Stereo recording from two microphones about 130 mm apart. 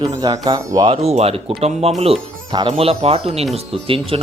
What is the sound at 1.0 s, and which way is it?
Speech, 50° right (ahead or behind).